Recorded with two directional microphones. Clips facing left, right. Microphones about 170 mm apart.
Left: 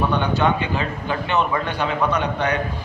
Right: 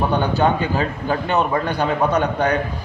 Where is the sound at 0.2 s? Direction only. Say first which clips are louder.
Right 2 dB; 40° right (ahead or behind).